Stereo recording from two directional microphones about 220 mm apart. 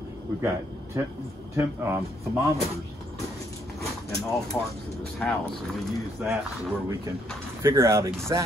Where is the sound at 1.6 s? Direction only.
10° right (ahead or behind).